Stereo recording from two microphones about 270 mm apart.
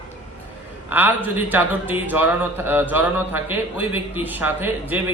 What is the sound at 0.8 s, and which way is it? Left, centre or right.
Speech, centre.